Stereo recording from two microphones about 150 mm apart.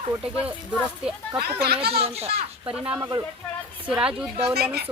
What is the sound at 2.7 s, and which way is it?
Speech, 5° right (ahead or behind).